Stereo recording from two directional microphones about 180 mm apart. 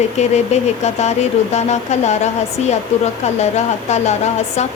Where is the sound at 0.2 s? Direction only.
40° left (ahead or behind).